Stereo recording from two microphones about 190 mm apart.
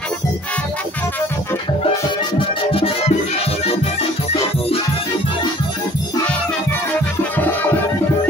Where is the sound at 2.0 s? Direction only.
30° left (ahead or behind).